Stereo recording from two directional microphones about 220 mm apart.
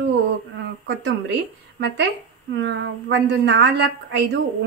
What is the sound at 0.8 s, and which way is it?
Speech, 50° right (ahead or behind).